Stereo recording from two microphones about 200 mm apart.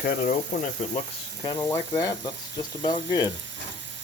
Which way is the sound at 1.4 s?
20° left (ahead or behind).